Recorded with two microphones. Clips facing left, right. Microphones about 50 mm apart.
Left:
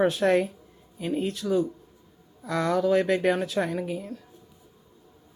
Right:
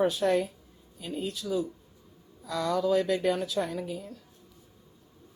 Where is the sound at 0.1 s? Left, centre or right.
Left.